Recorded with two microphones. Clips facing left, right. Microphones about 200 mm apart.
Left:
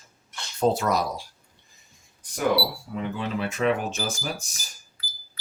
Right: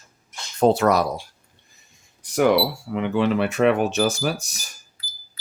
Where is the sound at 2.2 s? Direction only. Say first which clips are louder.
Right 7 dB; 75° right (ahead or behind).